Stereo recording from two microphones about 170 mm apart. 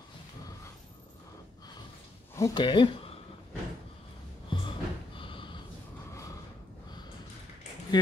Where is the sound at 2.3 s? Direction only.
25° left (ahead or behind).